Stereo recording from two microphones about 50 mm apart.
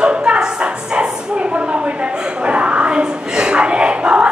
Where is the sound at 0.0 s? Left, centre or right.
Right.